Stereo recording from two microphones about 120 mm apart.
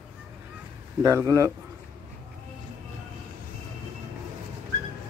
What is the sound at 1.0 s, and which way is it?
Speech, 25° right (ahead or behind).